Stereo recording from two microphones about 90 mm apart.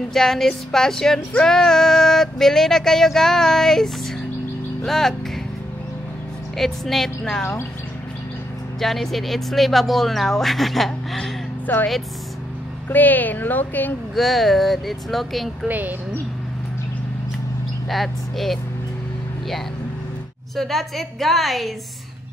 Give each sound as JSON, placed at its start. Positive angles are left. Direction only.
{"t": 0.1, "sound": "female singing", "side_deg": 5}
{"t": 6.5, "sound": "female singing", "side_deg": 0}
{"t": 8.7, "sound": "female singing", "side_deg": 5}
{"t": 11.6, "sound": "speech", "side_deg": 20}
{"t": 12.9, "sound": "a woman's voice", "side_deg": 20}
{"t": 14.1, "sound": "female singing", "side_deg": 0}
{"t": 17.8, "sound": "female singing", "side_deg": 0}
{"t": 20.5, "sound": "female singing", "side_deg": 0}